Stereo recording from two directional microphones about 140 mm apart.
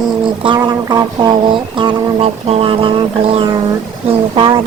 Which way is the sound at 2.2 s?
45° right (ahead or behind).